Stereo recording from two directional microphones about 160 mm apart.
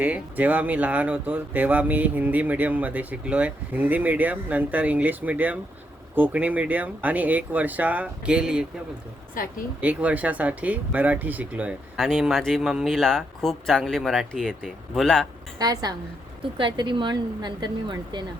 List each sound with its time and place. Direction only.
0.0 s speech: 10° right (ahead or behind)
9.4 s a woman's voice: 60° left (ahead or behind)
9.8 s speech: 10° right (ahead or behind)
15.5 s speech: 25° right (ahead or behind)